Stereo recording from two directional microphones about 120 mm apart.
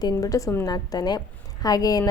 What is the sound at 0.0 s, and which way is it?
A woman's voice, 30° left (ahead or behind).